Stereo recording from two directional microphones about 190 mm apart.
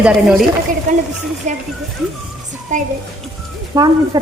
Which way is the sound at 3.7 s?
20° right (ahead or behind).